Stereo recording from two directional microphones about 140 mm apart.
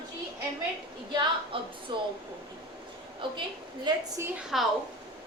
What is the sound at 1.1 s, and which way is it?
Speech, 35° right (ahead or behind).